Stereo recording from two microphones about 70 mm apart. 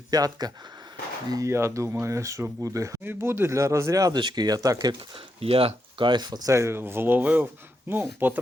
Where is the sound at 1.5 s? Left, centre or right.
Right.